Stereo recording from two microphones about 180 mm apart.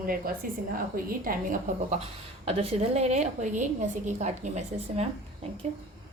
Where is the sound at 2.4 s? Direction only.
30° right (ahead or behind).